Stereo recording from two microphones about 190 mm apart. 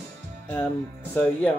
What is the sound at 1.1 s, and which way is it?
Speech, 5° left (ahead or behind).